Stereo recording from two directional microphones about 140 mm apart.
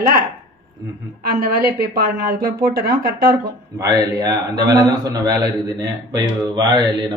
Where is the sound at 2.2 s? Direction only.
90° right.